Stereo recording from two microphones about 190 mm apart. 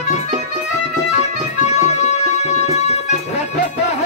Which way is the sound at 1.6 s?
35° left (ahead or behind).